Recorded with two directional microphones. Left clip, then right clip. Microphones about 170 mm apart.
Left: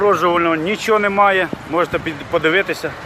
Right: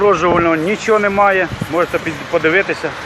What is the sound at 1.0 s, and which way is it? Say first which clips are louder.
Speech: right 1 dB; 15° left (ahead or behind).